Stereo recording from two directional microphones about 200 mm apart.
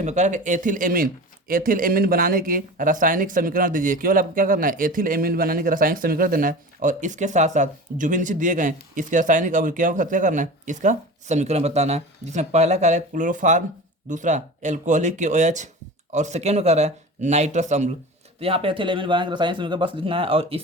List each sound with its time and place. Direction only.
0.0 s speech: 35° right (ahead or behind)